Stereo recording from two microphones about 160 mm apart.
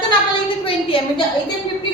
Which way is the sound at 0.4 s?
35° left (ahead or behind).